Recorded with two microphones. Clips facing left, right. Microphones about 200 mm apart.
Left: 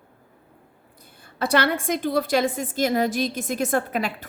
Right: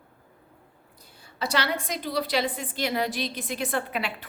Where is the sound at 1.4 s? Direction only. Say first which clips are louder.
Left 6 dB; 55° left (ahead or behind).